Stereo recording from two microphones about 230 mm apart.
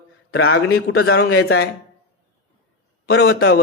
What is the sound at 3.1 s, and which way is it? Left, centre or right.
Speech, left.